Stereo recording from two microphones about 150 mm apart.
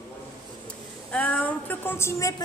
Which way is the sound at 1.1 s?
10° left (ahead or behind).